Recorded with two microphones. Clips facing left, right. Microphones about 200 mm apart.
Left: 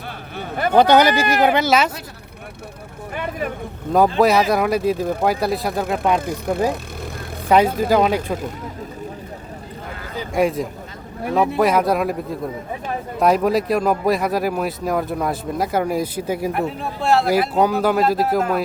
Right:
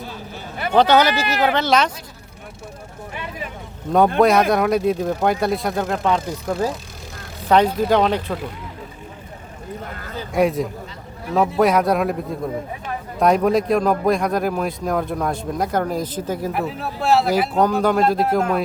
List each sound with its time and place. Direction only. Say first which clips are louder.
0.3 s a sound: left 4 dB; 50° left (ahead or behind)
0.8 s speech: left 1 dB; 15° left (ahead or behind)
3.2 s speech: left 7 dB; 50° left (ahead or behind)
4.2 s speech: right 1 dB; centre (ahead or behind)
6.1 s speech: left 2 dB; 60° left (ahead or behind)
7.4 s speech: even; 10° left (ahead or behind)
10.3 s speech: right 1 dB; centre (ahead or behind)
13.1 s speech: right 1 dB; centre (ahead or behind)
16.5 s speech: left 1 dB; centre (ahead or behind)